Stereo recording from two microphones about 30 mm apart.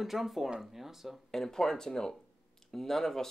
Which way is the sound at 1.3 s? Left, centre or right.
Centre.